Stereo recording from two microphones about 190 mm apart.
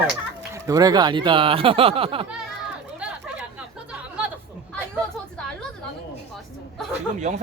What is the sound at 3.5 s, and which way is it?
Chatter, 5° right (ahead or behind).